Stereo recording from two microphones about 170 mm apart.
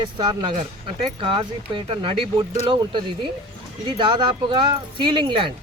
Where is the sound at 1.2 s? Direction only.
30° right (ahead or behind).